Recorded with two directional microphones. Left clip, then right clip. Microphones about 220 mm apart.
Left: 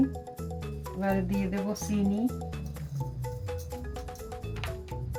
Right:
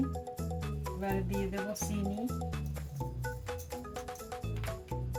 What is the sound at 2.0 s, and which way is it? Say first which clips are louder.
Speech: left 6 dB; centre (ahead or behind).